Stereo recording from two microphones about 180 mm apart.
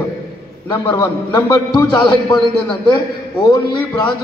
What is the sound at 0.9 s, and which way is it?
A man's voice, 25° left (ahead or behind).